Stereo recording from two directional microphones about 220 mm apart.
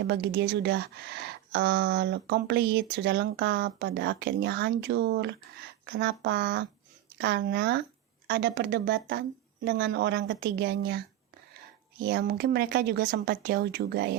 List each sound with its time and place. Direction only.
0.1 s speech: 50° right (ahead or behind)